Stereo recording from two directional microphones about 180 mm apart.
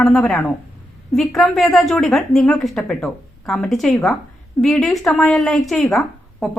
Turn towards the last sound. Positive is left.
turn(degrees=0)  # may be behind; listen again after turning